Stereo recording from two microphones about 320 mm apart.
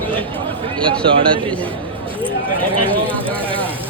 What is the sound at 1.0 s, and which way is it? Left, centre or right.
Speech, centre.